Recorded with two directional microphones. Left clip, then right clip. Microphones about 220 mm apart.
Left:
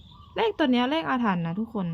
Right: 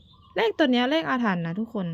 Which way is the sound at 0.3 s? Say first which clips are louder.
Right 2 dB; 20° right (ahead or behind).